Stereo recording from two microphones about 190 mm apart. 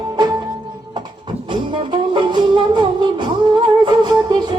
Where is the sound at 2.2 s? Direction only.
25° right (ahead or behind).